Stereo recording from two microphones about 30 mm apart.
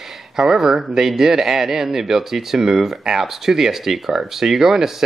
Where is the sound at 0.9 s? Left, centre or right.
Centre.